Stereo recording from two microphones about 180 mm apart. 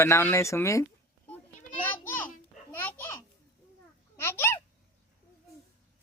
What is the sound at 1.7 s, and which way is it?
Children playing, 10° left (ahead or behind).